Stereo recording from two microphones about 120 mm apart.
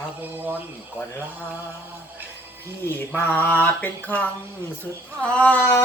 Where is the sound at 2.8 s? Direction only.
15° left (ahead or behind).